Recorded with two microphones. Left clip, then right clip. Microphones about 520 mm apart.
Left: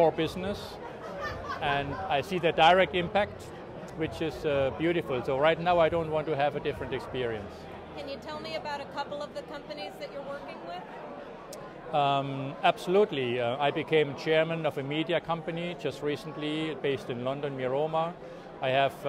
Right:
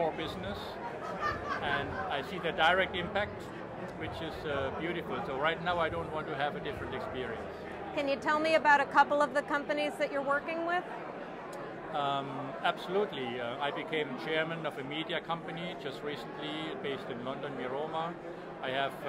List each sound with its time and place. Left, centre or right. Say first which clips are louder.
0.0 s speech: left 8 dB; left
1.6 s speech: left 3 dB; left
7.9 s a woman's voice: right 9 dB; right
11.9 s a man's voice: left 7 dB; left